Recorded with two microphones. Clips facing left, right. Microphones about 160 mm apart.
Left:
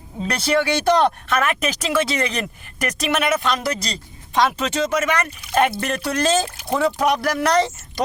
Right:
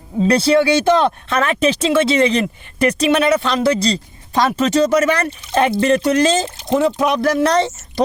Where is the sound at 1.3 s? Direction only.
30° right (ahead or behind).